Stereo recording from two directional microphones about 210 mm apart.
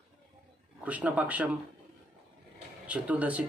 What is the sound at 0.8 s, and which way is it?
Speech, 5° right (ahead or behind).